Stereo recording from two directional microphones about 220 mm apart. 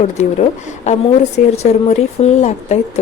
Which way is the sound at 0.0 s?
30° left (ahead or behind).